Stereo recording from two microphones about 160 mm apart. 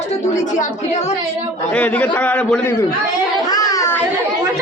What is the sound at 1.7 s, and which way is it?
A man's voice, 10° left (ahead or behind).